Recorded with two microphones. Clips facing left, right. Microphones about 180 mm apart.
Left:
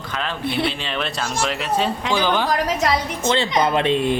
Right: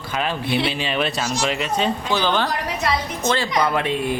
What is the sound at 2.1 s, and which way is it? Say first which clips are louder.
Speech: left 1 dB; 10° left (ahead or behind).